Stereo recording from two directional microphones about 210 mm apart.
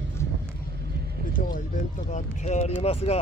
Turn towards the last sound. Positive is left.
turn(degrees=30)  # may be behind; listen again after turning